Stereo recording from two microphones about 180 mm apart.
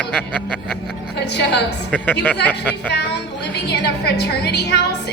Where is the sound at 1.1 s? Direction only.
70° left (ahead or behind).